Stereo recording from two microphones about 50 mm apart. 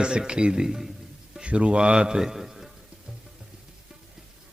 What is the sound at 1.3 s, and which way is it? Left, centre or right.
A man's voice, right.